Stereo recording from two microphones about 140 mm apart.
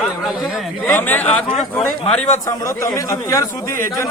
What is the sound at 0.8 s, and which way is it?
Speech, 15° left (ahead or behind).